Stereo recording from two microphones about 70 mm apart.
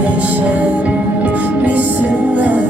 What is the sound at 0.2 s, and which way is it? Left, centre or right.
Music, right.